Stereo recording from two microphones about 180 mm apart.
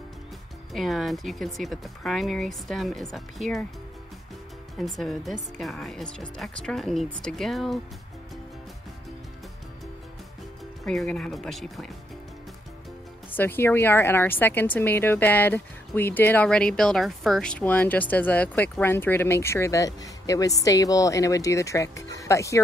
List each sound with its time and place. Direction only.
0.7 s speech: centre (ahead or behind)
4.7 s speech: centre (ahead or behind)
10.9 s speech: 5° left (ahead or behind)
13.3 s speech: 10° left (ahead or behind)